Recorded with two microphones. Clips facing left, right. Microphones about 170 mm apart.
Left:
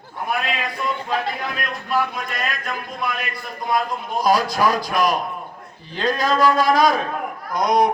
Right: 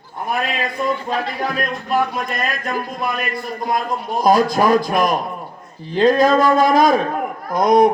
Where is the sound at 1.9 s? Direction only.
45° right (ahead or behind).